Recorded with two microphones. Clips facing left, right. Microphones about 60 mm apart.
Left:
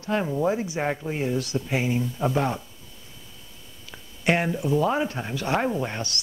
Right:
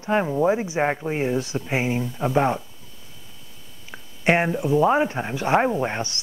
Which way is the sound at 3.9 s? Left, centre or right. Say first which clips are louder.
Right 3 dB; right.